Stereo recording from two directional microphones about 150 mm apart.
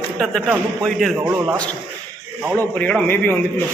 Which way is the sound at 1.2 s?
15° right (ahead or behind).